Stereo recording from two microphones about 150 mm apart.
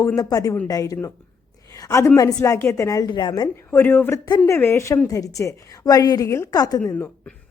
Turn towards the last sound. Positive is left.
turn(degrees=15)  # may be behind; listen again after turning